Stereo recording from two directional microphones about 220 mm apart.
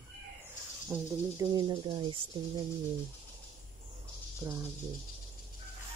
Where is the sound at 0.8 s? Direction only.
15° right (ahead or behind).